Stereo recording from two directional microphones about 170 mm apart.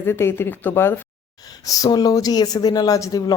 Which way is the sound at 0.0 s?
15° left (ahead or behind).